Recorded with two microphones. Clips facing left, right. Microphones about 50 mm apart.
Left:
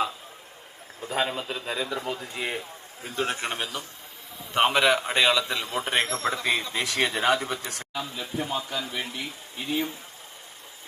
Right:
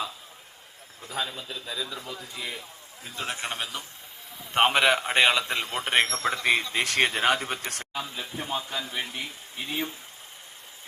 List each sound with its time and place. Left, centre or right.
1.0 s a man's voice: left
3.7 s a man's voice: centre
4.5 s a man's voice: right
7.9 s a man's voice: right